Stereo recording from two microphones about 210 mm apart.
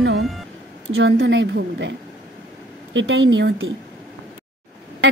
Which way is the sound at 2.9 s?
65° right (ahead or behind).